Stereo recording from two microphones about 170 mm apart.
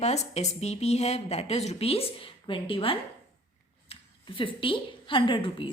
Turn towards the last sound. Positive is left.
turn(degrees=30)  # may be behind; listen again after turning